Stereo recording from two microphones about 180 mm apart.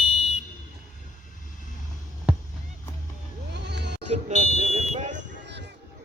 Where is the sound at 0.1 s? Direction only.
30° left (ahead or behind).